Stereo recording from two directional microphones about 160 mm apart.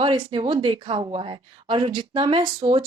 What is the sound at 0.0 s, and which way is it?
Speech, 30° right (ahead or behind).